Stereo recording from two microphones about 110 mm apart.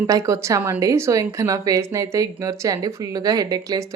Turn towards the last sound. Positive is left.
turn(degrees=-30)  # may be behind; listen again after turning